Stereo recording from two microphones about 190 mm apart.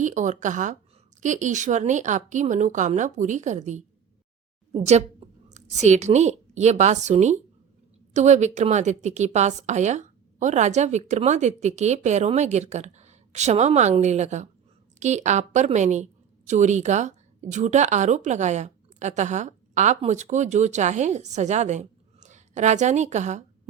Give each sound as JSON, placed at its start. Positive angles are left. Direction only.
{"t": 0.0, "sound": "a woman's voice", "side_deg": -40}